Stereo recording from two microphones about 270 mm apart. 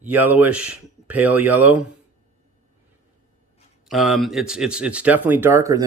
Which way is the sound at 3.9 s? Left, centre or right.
Centre.